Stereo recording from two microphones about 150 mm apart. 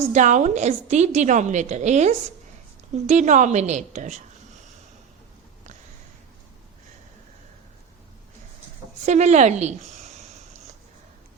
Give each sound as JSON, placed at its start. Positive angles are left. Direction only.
{"t": 0.1, "sound": "a woman's voice", "side_deg": -55}
{"t": 9.0, "sound": "a woman's voice", "side_deg": -50}